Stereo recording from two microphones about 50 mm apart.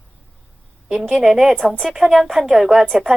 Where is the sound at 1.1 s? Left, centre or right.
Centre.